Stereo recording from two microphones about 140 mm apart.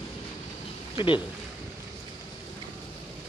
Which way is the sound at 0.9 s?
35° left (ahead or behind).